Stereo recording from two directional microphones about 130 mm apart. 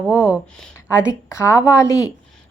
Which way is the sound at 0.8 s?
20° left (ahead or behind).